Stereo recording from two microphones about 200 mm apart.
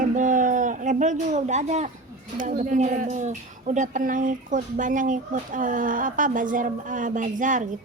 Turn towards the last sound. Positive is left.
turn(degrees=-40)  # may be behind; listen again after turning